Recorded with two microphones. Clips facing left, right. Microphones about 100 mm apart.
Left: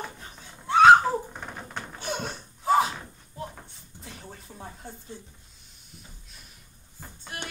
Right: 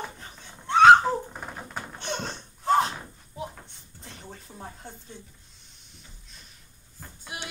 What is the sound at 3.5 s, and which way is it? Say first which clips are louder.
Dishes: left 1 dB; centre (ahead or behind).